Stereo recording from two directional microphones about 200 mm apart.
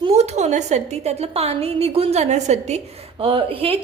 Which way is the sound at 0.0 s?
30° right (ahead or behind).